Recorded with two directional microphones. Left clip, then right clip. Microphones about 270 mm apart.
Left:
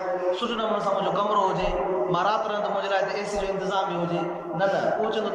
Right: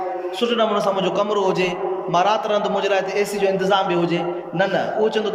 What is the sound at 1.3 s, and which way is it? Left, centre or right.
A man's voice, right.